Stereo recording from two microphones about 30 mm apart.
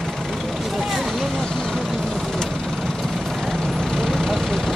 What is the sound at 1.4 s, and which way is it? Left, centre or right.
Vehicle, left.